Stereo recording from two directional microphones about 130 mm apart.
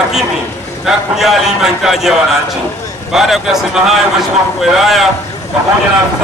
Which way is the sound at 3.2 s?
Centre (ahead or behind).